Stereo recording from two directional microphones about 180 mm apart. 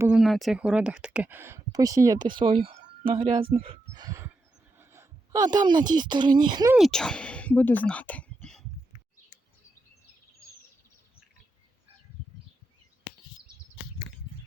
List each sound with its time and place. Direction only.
0.0 s speech: 5° right (ahead or behind); by 4.3 s 20° right (ahead or behind)
4.8 s a sound: 15° right (ahead or behind)
5.9 s speech: 25° right (ahead or behind)
6.7 s speech: centre (ahead or behind)